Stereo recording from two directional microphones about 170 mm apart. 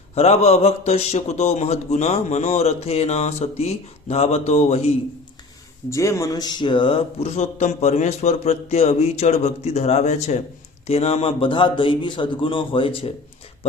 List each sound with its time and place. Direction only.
0.1 s a man's voice: 40° left (ahead or behind)
5.9 s a man's voice: 20° left (ahead or behind)